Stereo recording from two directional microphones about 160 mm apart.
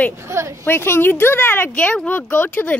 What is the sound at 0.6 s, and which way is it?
Speech, 15° left (ahead or behind).